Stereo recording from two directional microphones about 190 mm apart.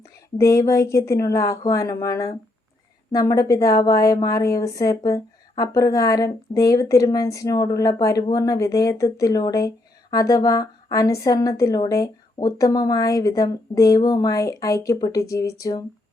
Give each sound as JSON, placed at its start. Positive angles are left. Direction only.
{"t": 0.3, "sound": "speech", "side_deg": 15}